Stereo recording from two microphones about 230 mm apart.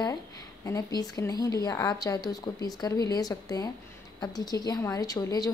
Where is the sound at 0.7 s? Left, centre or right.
Centre.